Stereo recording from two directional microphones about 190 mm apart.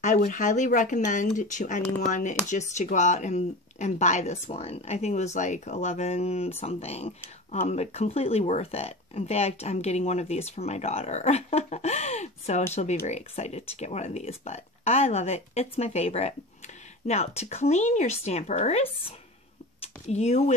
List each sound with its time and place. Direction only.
0.0 s speech: 45° left (ahead or behind)